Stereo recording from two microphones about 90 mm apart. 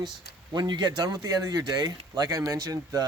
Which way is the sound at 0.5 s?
50° right (ahead or behind).